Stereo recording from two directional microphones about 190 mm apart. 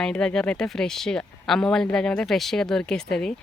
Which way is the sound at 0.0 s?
5° left (ahead or behind).